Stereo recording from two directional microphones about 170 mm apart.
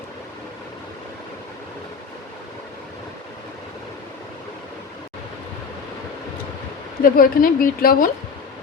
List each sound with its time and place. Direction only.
7.0 s a woman's voice: 60° left (ahead or behind)